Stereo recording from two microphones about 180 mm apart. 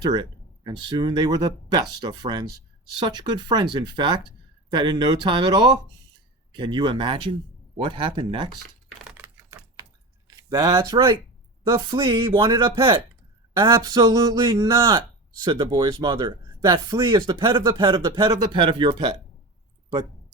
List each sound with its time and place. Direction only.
0.0 s speech: 25° right (ahead or behind)
9.0 s typing: 10° right (ahead or behind)
10.2 s speech: 20° right (ahead or behind)